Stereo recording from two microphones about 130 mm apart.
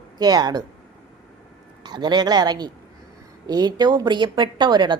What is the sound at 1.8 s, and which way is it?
A woman's voice, 35° right (ahead or behind).